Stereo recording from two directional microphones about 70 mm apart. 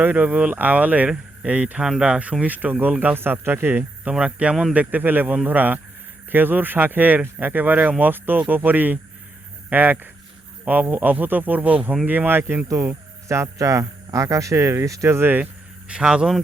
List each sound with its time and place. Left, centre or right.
0.0 s speech: right
4.1 s speech: centre; by 15.4 s right
15.9 s speech: centre